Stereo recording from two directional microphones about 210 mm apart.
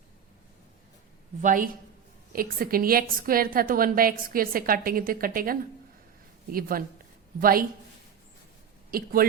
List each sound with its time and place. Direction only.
1.4 s a woman's voice: 40° right (ahead or behind)
8.9 s a woman's voice: 45° right (ahead or behind)